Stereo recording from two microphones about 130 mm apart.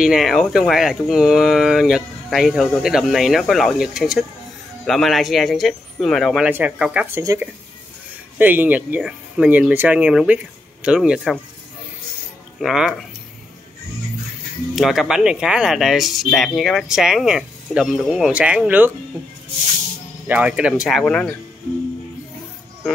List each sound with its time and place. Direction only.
0.0 s speech: centre (ahead or behind)
7.2 s speech: 20° right (ahead or behind); by 11.3 s 5° right (ahead or behind)
12.5 s speech: 5° right (ahead or behind)
14.8 s speech: centre (ahead or behind)
20.2 s speech: 10° right (ahead or behind)
21.0 s speech: 10° left (ahead or behind)